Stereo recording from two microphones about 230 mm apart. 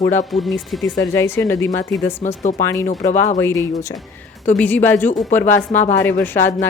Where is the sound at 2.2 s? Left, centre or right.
Left.